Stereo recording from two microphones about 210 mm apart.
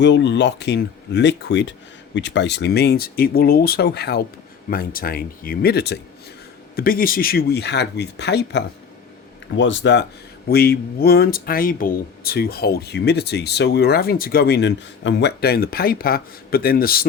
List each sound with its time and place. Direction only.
0.0 s speech: 55° left (ahead or behind)
10.5 s speech: 45° left (ahead or behind)